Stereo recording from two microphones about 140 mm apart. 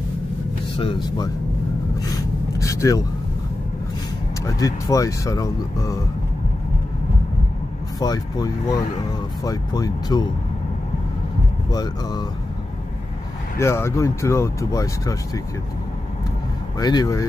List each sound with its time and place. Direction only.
0.7 s speech: 35° left (ahead or behind)
2.0 s a sound: 25° left (ahead or behind)
4.5 s speech: 25° left (ahead or behind)
8.0 s speech: 30° left (ahead or behind)
11.7 s speech: 30° left (ahead or behind)
13.6 s speech: 20° left (ahead or behind)
16.8 s speech: 25° left (ahead or behind)